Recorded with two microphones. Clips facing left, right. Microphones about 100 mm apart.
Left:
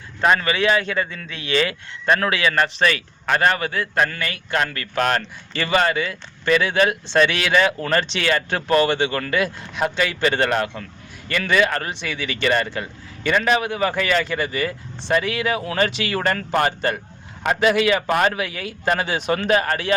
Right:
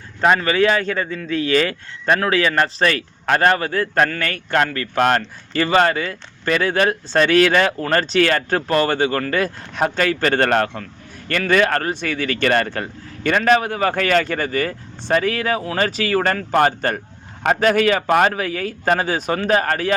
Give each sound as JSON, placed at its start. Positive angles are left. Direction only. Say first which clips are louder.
{"t": 0.2, "sound": "speech", "louder": "right 3 dB", "side_deg": -30}